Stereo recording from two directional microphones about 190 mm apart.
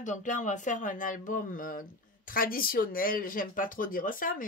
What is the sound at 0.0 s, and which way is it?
Speech, 40° left (ahead or behind).